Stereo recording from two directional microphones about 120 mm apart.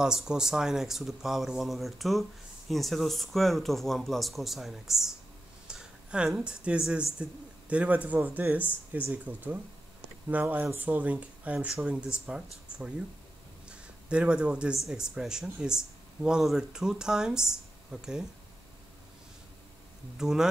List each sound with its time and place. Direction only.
0.0 s speech: 5° right (ahead or behind)
13.7 s a sound: 10° right (ahead or behind)
14.9 s speech: 5° right (ahead or behind)
20.2 s speech: 5° right (ahead or behind)